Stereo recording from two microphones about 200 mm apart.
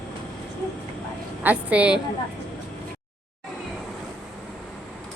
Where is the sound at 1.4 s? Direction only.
5° right (ahead or behind).